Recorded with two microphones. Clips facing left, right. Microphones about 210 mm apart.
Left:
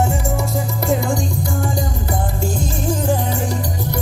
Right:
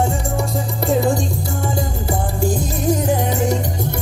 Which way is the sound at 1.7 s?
20° right (ahead or behind).